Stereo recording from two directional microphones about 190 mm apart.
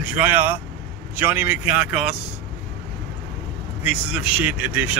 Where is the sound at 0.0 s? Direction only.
10° right (ahead or behind).